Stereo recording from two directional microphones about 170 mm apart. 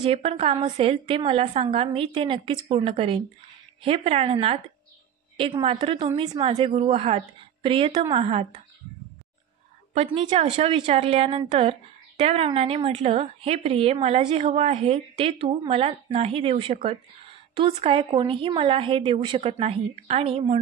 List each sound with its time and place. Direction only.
0.0 s a woman's voice: 35° right (ahead or behind)
9.9 s a woman's voice: 35° right (ahead or behind)